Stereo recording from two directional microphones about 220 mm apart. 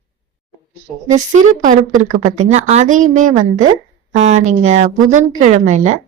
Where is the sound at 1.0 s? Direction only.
35° right (ahead or behind).